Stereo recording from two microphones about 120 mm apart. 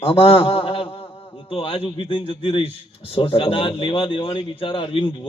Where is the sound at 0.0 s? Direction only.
50° left (ahead or behind).